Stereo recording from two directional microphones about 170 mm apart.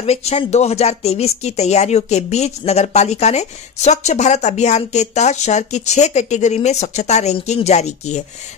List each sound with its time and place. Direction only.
0.0 s speech: 40° left (ahead or behind)